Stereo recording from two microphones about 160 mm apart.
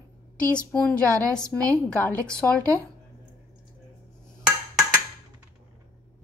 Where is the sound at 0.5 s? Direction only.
5° left (ahead or behind).